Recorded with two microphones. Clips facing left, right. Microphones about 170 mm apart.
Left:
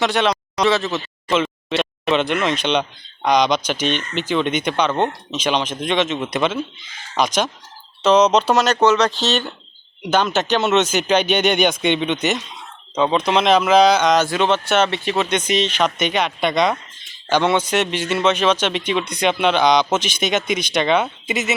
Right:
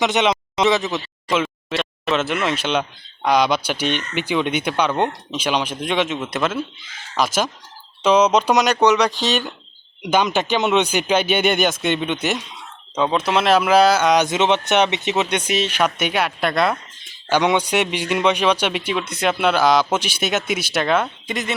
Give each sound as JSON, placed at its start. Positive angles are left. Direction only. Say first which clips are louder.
{"t": 0.0, "sound": "a man's voice", "louder": "even", "side_deg": -20}
{"t": 1.3, "sound": "a man's voice", "louder": "left 2 dB", "side_deg": 0}